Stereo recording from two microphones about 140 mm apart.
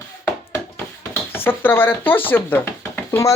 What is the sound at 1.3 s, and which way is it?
Speech, 15° left (ahead or behind).